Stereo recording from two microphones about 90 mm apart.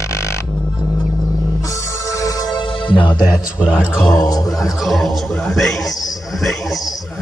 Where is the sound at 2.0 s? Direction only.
40° left (ahead or behind).